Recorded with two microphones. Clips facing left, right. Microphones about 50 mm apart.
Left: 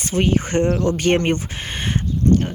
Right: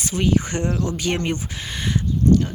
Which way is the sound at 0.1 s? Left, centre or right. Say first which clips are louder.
Left 3 dB; left.